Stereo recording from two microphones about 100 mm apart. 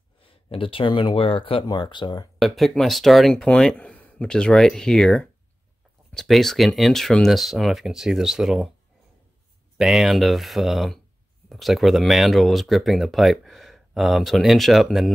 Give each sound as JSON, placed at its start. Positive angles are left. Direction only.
{"t": 0.2, "sound": "speech", "side_deg": 65}
{"t": 1.7, "sound": "speech", "side_deg": 50}
{"t": 2.3, "sound": "speech", "side_deg": 0}
{"t": 9.8, "sound": "speech", "side_deg": -5}